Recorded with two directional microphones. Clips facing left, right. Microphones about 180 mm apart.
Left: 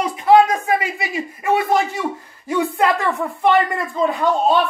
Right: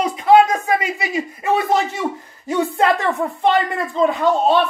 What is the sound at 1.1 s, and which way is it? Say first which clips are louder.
A man's voice: even; 20° right (ahead or behind).